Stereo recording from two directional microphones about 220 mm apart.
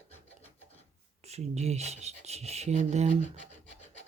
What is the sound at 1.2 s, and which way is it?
Speech, 30° right (ahead or behind).